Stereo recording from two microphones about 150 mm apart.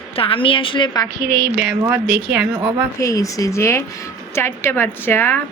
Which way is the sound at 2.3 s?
10° right (ahead or behind).